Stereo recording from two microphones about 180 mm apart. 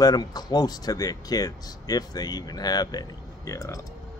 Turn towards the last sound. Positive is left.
turn(degrees=20)  # may be behind; listen again after turning